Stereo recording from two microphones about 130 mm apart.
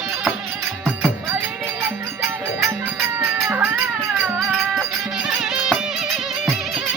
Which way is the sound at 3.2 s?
20° right (ahead or behind).